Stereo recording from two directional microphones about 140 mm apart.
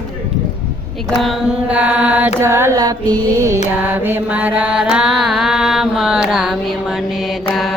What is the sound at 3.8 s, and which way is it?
Mantra, 15° right (ahead or behind).